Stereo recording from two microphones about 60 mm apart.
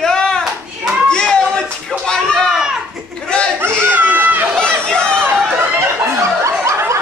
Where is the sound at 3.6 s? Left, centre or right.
Right.